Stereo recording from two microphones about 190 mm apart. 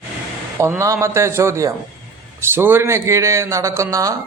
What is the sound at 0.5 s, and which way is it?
Speech, 15° right (ahead or behind).